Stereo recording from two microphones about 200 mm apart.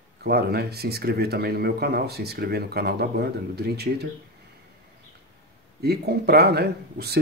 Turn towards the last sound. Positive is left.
turn(degrees=-50)  # may be behind; listen again after turning